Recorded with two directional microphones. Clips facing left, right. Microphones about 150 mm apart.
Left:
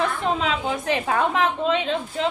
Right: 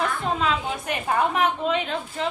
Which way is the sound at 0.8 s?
90° left.